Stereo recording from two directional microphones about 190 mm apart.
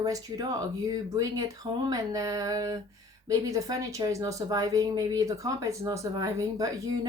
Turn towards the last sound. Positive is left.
turn(degrees=-20)  # may be behind; listen again after turning